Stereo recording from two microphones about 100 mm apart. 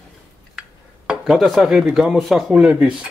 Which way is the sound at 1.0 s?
Centre (ahead or behind).